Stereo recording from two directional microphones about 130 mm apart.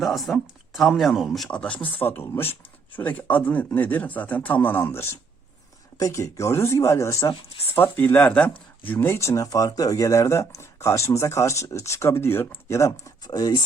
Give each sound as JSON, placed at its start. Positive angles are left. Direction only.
{"t": 0.0, "sound": "speech", "side_deg": 0}